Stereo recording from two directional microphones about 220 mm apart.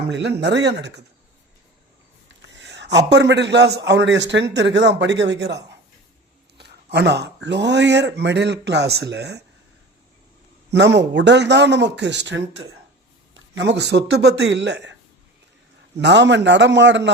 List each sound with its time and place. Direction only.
0.1 s a man's voice: 50° right (ahead or behind)
2.4 s a man's voice: 55° right (ahead or behind)
10.7 s a man's voice: 50° right (ahead or behind)
16.0 s a man's voice: 55° right (ahead or behind)